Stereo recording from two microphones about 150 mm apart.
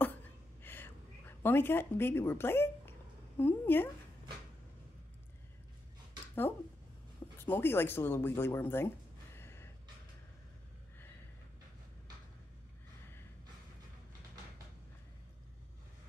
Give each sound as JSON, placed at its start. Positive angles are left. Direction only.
{"t": 0.6, "sound": "a sound", "side_deg": 15}
{"t": 3.3, "sound": "a woman's voice", "side_deg": 15}
{"t": 7.3, "sound": "speech", "side_deg": 15}